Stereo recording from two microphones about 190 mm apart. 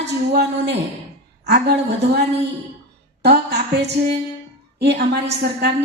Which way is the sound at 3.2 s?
60° right (ahead or behind).